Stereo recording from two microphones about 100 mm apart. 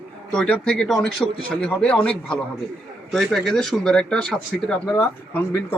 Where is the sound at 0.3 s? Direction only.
10° left (ahead or behind).